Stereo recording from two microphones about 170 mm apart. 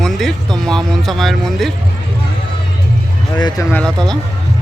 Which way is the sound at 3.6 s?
20° left (ahead or behind).